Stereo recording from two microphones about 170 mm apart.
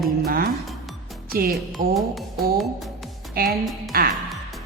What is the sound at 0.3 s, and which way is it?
Music, 60° right (ahead or behind).